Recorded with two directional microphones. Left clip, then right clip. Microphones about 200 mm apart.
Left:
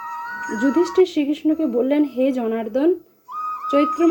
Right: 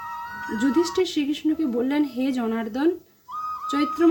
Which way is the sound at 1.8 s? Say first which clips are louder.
Left 6 dB; 80° right.